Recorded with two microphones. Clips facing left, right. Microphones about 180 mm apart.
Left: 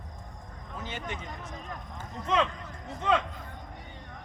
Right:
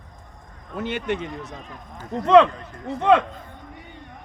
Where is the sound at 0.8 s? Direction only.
70° right (ahead or behind).